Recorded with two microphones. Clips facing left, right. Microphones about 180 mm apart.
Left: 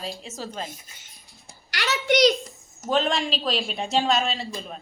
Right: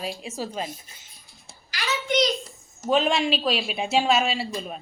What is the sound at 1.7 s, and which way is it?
Speech, 75° left (ahead or behind).